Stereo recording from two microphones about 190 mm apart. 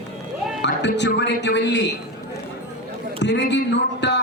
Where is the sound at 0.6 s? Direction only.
65° left (ahead or behind).